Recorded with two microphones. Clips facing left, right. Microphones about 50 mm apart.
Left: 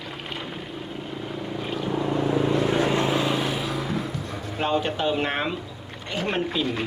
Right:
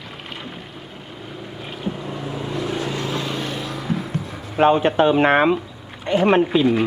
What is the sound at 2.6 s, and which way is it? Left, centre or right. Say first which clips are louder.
Vehicle: left 3 dB; left.